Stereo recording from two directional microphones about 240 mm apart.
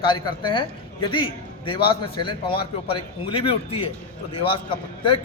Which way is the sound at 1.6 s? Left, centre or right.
Left.